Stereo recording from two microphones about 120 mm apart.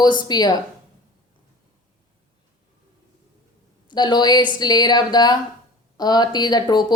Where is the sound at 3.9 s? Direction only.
35° left (ahead or behind).